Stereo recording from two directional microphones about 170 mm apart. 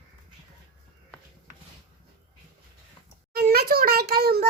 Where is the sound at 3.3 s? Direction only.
65° right (ahead or behind).